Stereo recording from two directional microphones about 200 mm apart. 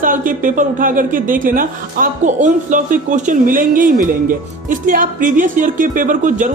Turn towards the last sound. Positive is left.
turn(degrees=-40)  # may be behind; listen again after turning